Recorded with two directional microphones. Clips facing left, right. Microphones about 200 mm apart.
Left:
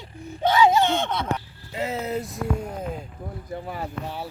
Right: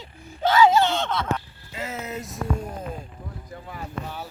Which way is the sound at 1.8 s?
30° left (ahead or behind).